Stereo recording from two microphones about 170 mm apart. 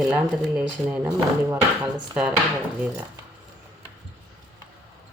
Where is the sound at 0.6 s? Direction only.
5° right (ahead or behind).